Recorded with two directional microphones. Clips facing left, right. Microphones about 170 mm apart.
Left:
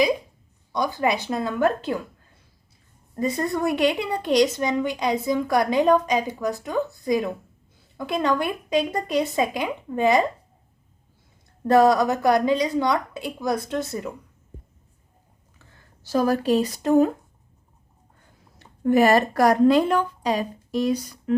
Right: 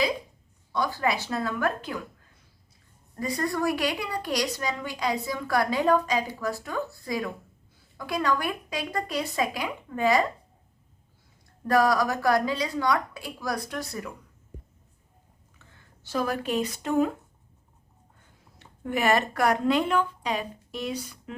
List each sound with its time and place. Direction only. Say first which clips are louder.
0.7 s a woman's voice: left 4 dB; 20° left (ahead or behind)
3.2 s a woman's voice: left 4 dB; 25° left (ahead or behind)
11.7 s a woman's voice: left 5 dB; 25° left (ahead or behind)
16.0 s a woman's voice: left 8 dB; 35° left (ahead or behind)
18.6 s a woman's voice: left 9 dB; 40° left (ahead or behind)